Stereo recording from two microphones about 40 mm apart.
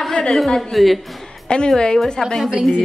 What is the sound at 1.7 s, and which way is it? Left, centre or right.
Speech, centre.